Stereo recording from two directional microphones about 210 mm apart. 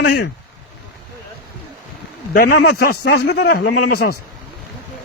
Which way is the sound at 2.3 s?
45° left (ahead or behind).